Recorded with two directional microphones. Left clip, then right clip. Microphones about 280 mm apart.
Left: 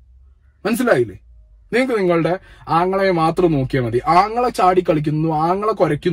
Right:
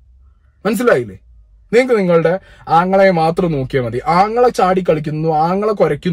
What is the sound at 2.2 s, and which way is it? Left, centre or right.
Speech, centre.